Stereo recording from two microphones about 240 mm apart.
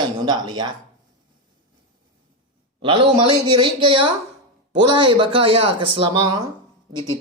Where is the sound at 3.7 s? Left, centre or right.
Centre.